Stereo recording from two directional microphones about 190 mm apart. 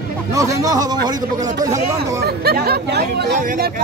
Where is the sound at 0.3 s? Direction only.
15° right (ahead or behind).